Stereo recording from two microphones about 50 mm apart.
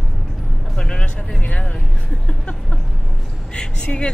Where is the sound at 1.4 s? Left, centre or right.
Left.